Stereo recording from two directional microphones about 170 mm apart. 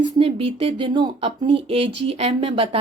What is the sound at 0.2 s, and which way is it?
A woman's voice, 35° right (ahead or behind).